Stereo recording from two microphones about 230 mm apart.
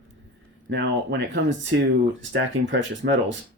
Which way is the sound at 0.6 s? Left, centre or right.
Right.